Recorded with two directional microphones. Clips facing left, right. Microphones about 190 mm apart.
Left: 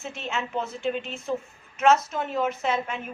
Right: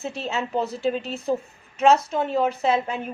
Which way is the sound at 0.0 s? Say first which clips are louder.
Right 4 dB; 35° right (ahead or behind).